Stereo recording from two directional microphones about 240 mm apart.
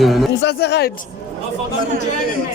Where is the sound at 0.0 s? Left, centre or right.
Centre.